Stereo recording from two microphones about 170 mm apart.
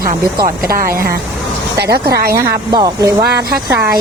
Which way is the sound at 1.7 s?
70° right (ahead or behind).